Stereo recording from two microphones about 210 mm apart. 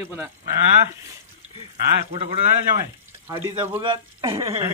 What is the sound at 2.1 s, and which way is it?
Speech, 25° right (ahead or behind).